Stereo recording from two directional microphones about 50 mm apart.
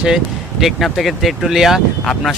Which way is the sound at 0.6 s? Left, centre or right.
Centre.